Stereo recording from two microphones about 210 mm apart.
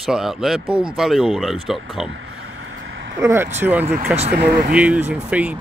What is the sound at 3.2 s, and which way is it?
Speech, 10° right (ahead or behind).